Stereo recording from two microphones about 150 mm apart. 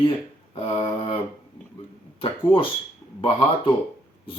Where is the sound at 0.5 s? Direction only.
35° left (ahead or behind).